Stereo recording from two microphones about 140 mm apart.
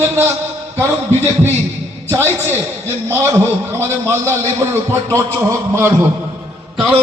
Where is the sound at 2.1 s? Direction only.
15° right (ahead or behind).